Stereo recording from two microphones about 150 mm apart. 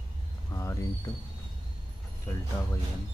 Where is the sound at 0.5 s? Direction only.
20° left (ahead or behind).